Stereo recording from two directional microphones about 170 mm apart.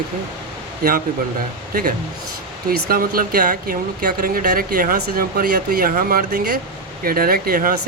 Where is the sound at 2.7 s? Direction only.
60° right (ahead or behind).